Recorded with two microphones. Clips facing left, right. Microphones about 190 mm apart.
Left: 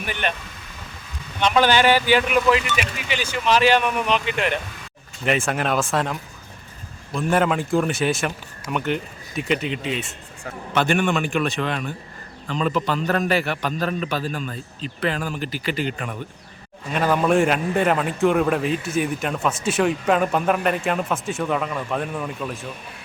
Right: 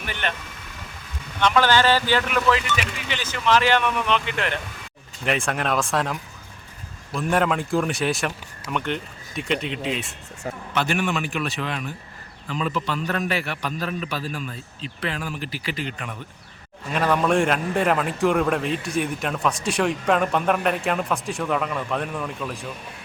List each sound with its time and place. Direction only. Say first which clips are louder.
0.0 s speech: left 3 dB; 15° left (ahead or behind)
1.4 s speech: left 1 dB; 15° left (ahead or behind)
5.2 s a man's voice: left 2 dB; centre (ahead or behind)